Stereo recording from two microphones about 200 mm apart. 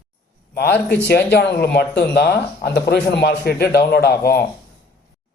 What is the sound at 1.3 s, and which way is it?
A man's voice, 55° left (ahead or behind).